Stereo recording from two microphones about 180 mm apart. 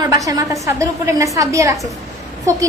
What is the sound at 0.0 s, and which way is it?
A woman's voice, 20° right (ahead or behind).